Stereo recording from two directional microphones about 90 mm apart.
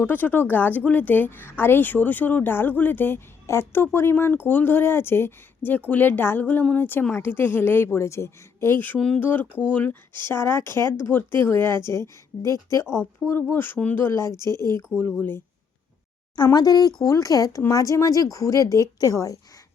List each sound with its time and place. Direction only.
0.0 s speech: 20° left (ahead or behind)
9.0 s speech: 5° left (ahead or behind)
9.2 s speech: 20° left (ahead or behind)
14.5 s speech: 45° right (ahead or behind)
16.3 s speech: 50° left (ahead or behind)